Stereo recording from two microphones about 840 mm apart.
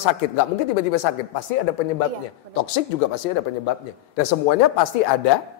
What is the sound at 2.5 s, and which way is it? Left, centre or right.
A man's voice, left.